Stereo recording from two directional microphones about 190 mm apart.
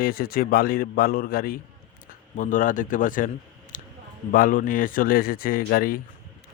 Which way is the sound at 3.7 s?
45° left (ahead or behind).